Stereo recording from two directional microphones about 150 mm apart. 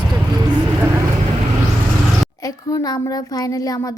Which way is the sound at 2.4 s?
25° left (ahead or behind).